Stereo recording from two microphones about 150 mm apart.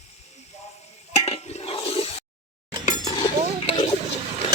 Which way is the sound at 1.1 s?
45° left (ahead or behind).